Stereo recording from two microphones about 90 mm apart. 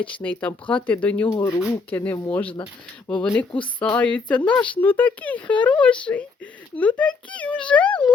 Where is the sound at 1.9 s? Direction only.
20° left (ahead or behind).